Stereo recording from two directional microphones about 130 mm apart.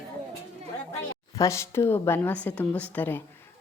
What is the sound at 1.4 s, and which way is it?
A woman's voice, 25° left (ahead or behind).